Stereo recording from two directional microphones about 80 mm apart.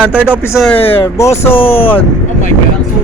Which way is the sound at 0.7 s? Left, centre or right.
Left.